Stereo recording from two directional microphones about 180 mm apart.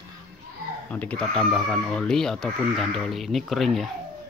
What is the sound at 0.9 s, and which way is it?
Speech, 10° left (ahead or behind).